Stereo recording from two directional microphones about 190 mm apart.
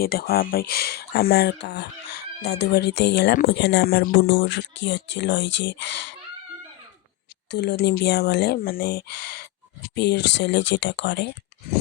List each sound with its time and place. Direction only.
0.0 s speech: 50° left (ahead or behind); by 6.1 s 70° left (ahead or behind)
7.5 s speech: 60° left (ahead or behind)